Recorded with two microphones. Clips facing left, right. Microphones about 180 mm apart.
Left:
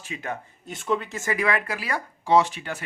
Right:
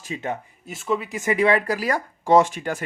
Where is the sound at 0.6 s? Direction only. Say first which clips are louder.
Right 1 dB; centre (ahead or behind); by 2.8 s 45° right (ahead or behind).